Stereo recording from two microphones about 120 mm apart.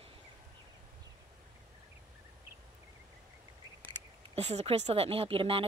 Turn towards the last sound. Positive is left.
turn(degrees=-50)  # may be behind; listen again after turning